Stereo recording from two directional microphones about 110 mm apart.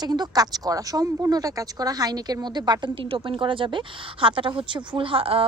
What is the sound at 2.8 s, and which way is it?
A woman's voice, 50° right (ahead or behind).